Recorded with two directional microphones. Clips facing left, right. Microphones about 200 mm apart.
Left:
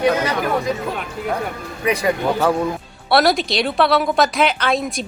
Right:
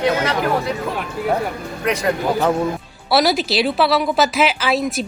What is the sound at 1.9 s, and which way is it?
Speech, 10° left (ahead or behind).